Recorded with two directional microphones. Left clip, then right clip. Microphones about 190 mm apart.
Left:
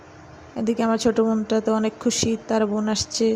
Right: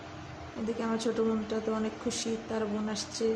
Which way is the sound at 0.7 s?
45° left (ahead or behind).